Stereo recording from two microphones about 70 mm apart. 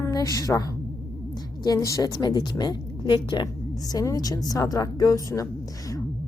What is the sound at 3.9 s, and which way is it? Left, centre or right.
A woman's voice, left.